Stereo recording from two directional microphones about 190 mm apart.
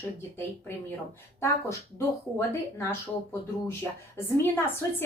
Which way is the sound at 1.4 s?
15° left (ahead or behind).